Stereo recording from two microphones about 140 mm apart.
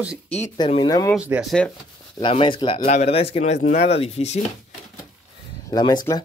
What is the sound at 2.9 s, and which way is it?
Speech, 50° left (ahead or behind).